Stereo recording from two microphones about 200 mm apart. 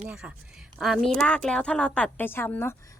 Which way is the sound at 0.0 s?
5° right (ahead or behind).